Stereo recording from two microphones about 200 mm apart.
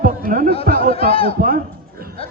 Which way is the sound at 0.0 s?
45° right (ahead or behind).